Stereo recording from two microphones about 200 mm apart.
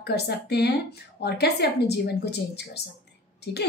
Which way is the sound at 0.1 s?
55° left (ahead or behind).